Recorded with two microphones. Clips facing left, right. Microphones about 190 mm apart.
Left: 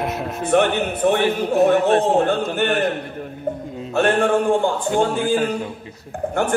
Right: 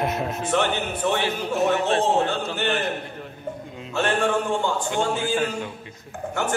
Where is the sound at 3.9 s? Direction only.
55° left (ahead or behind).